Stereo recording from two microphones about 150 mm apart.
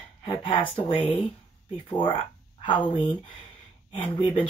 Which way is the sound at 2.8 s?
35° left (ahead or behind).